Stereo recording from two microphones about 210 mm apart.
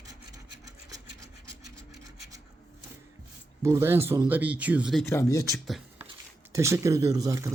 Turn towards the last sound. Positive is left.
turn(degrees=-15)  # may be behind; listen again after turning